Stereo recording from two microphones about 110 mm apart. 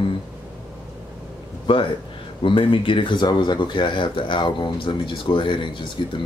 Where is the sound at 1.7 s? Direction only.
55° left (ahead or behind).